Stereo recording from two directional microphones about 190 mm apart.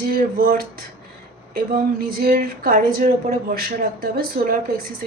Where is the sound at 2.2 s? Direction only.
50° right (ahead or behind).